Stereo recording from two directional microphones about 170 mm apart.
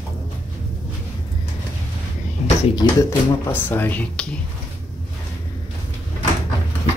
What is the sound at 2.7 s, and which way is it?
Speech, 20° left (ahead or behind).